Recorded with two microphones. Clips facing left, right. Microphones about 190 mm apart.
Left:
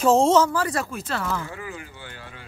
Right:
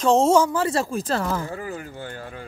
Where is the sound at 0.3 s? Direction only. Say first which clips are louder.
Right 1 dB; 15° right (ahead or behind); by 2.4 s 45° right (ahead or behind).